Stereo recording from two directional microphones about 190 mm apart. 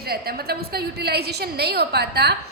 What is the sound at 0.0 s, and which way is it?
A woman's voice, 55° right (ahead or behind).